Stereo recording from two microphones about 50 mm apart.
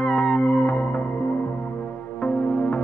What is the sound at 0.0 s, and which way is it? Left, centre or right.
Music, centre.